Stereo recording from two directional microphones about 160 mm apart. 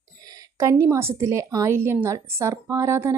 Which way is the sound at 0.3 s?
20° right (ahead or behind).